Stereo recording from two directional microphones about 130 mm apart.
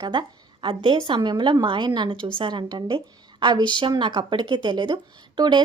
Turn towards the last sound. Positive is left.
turn(degrees=-35)  # may be behind; listen again after turning